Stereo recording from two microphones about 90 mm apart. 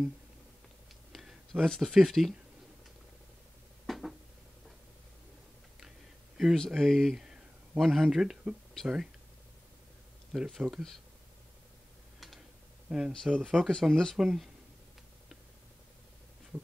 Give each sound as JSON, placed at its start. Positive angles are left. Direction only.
{"t": 1.1, "sound": "speech", "side_deg": 5}
{"t": 3.8, "sound": "a sound", "side_deg": 0}
{"t": 6.3, "sound": "speech", "side_deg": 0}
{"t": 10.3, "sound": "speech", "side_deg": -5}
{"t": 13.1, "sound": "speech", "side_deg": 5}